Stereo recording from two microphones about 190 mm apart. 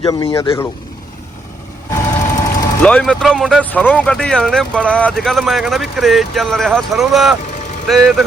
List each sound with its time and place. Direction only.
0.3 s speech: 15° left (ahead or behind)
1.9 s vehicle: 15° left (ahead or behind)
2.8 s speech: 5° left (ahead or behind)